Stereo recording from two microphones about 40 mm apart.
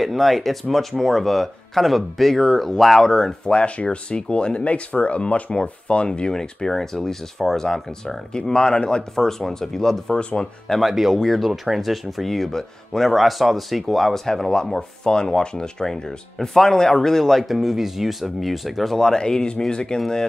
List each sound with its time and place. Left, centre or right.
0.0 s speech: centre
3.5 s speech: left
10.8 s speech: centre
19.1 s speech: centre